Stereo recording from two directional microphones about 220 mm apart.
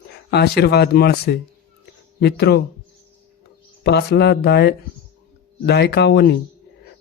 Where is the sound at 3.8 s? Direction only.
50° left (ahead or behind).